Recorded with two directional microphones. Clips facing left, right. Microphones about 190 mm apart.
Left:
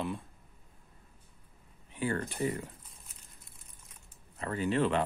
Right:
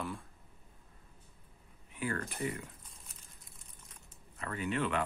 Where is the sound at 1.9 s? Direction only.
30° left (ahead or behind).